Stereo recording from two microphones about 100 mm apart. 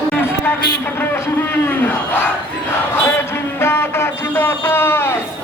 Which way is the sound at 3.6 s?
25° left (ahead or behind).